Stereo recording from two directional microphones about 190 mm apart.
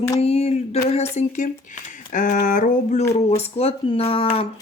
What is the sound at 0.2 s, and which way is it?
Speech, 35° left (ahead or behind).